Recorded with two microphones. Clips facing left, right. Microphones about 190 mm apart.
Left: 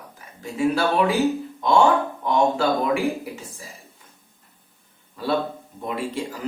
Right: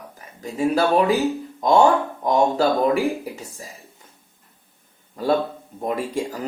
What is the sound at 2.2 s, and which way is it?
Speech, 40° right (ahead or behind).